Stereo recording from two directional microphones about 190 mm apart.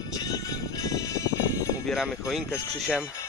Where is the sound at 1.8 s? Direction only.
Centre (ahead or behind).